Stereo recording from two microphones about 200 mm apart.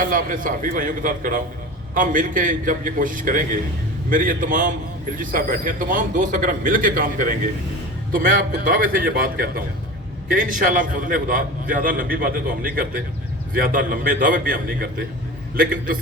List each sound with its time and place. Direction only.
0.0 s a man's voice: 45° right (ahead or behind)